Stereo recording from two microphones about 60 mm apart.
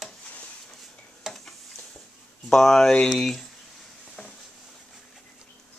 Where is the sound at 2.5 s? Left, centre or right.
Centre.